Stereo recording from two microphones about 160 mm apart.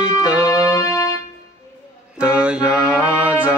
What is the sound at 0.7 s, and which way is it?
Music, 20° left (ahead or behind).